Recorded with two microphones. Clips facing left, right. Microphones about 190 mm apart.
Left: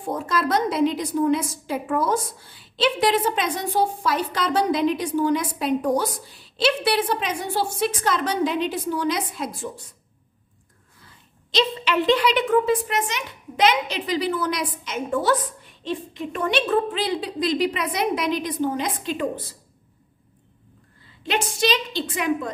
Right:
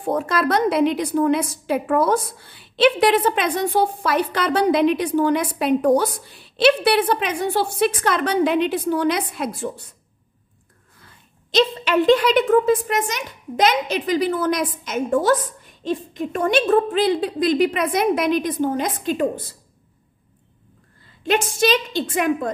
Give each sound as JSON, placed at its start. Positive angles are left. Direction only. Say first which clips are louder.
{"t": 0.0, "sound": "a woman's voice", "louder": "right 4 dB", "side_deg": -65}
{"t": 11.5, "sound": "a woman's voice", "louder": "right 4 dB", "side_deg": -50}
{"t": 21.2, "sound": "a woman's voice", "louder": "right 4 dB", "side_deg": -50}